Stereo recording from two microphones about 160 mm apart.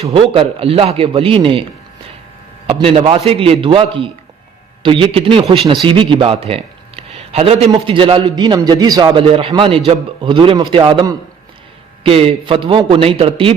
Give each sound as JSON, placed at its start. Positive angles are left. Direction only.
{"t": 0.0, "sound": "a man's voice", "side_deg": -35}
{"t": 2.6, "sound": "a man's voice", "side_deg": -35}